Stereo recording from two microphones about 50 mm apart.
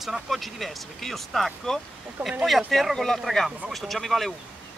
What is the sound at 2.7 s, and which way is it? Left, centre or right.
Speech, centre.